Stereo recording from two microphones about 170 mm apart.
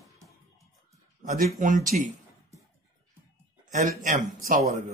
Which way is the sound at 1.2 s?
50° right (ahead or behind).